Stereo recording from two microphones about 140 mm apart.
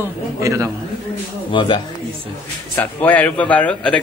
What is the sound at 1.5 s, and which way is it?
Speech, 35° left (ahead or behind).